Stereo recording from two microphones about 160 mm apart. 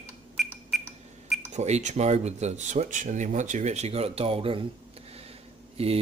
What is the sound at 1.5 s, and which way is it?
Speech, 45° right (ahead or behind).